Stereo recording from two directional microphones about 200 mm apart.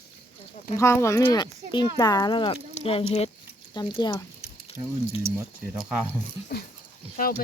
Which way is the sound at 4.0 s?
20° left (ahead or behind).